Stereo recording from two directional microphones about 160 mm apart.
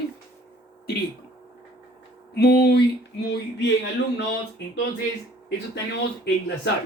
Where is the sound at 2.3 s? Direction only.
85° left.